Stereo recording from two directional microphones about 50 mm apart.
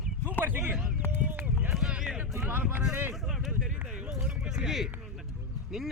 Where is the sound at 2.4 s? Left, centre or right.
Right.